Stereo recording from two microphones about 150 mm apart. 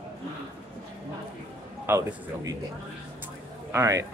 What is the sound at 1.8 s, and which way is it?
Speech, 15° right (ahead or behind).